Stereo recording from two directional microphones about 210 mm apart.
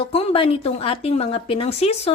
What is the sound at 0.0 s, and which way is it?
A woman's voice, 30° left (ahead or behind).